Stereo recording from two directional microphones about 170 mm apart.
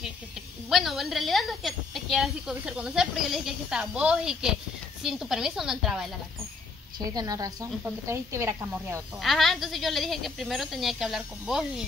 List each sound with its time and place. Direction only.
0.7 s a woman's voice: centre (ahead or behind)
7.0 s a woman's voice: 20° right (ahead or behind)
9.2 s a woman's voice: centre (ahead or behind)